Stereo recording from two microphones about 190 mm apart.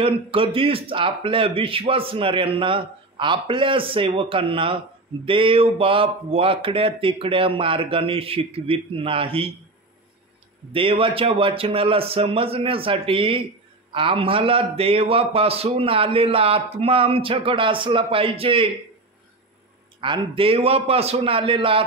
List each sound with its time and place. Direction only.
0.0 s speech: 30° right (ahead or behind)
10.7 s speech: 30° right (ahead or behind)
20.0 s speech: 30° right (ahead or behind)